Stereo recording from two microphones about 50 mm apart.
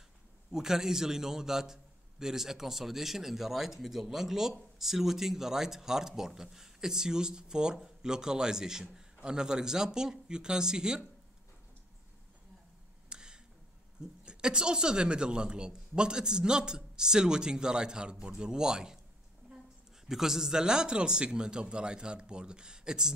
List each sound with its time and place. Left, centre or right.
0.5 s a man's voice: centre
13.1 s a sound: centre
14.2 s a man's voice: centre
20.1 s a man's voice: centre